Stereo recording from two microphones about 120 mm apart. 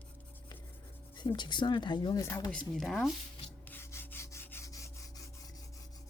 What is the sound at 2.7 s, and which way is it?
Speech, centre (ahead or behind).